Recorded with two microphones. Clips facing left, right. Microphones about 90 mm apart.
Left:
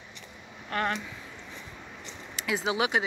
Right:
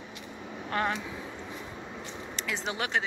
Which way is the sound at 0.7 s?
25° right (ahead or behind).